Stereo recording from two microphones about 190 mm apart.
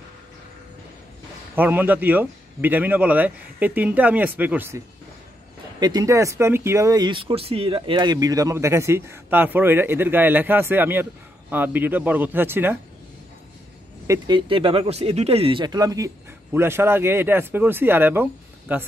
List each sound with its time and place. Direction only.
1.5 s speech: 10° right (ahead or behind)
14.0 s speech: 20° right (ahead or behind)